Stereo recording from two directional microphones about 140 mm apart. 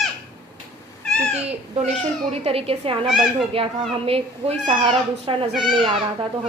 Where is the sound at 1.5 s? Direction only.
45° right (ahead or behind).